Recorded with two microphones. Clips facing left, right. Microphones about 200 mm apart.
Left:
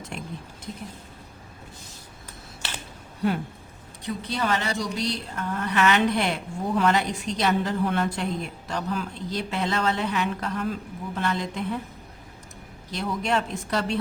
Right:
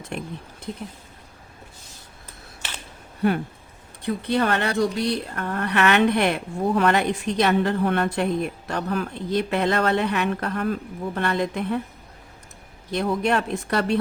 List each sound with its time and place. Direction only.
4.0 s speech: 60° right (ahead or behind)
12.9 s speech: 60° right (ahead or behind)